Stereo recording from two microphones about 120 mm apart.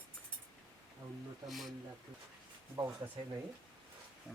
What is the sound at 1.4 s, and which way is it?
Speech, centre (ahead or behind).